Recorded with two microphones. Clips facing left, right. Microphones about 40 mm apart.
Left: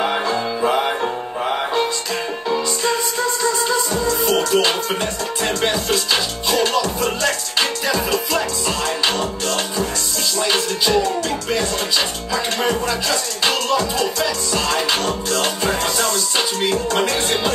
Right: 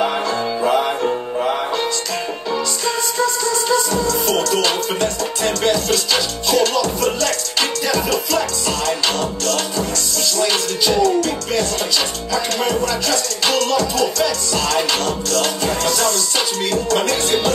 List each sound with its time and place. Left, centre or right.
0.0 s music: centre
3.9 s music: centre
12.6 s music: centre
16.0 s music: centre